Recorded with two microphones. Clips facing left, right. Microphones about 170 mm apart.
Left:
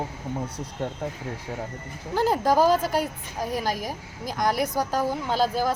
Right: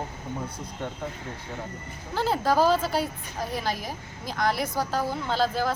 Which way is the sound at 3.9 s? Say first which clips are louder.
Left 3 dB; 10° left (ahead or behind).